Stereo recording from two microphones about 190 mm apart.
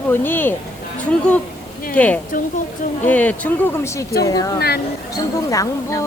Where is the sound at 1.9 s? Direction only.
10° left (ahead or behind).